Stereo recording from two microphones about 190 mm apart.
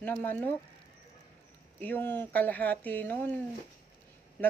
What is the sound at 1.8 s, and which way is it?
Speech, 10° left (ahead or behind).